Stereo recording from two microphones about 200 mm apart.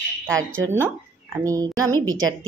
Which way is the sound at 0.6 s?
10° right (ahead or behind).